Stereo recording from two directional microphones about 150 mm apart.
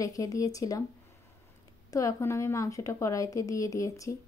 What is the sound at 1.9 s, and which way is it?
Speech, 20° left (ahead or behind).